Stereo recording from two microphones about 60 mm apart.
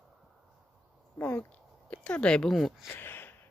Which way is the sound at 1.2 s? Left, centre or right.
Left.